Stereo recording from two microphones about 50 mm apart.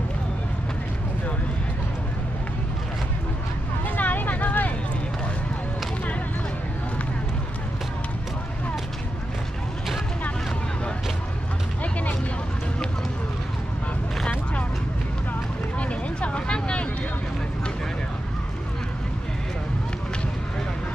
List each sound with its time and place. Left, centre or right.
3.9 s vehicle: left
11.8 s a sound: left
15.8 s vehicle: left